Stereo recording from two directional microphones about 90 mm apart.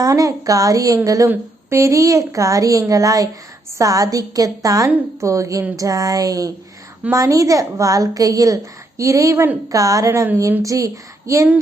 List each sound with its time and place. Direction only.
0.0 s a woman's voice: 40° right (ahead or behind)